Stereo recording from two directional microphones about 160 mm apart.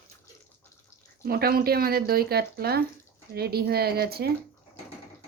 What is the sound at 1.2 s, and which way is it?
Speech, 70° right (ahead or behind).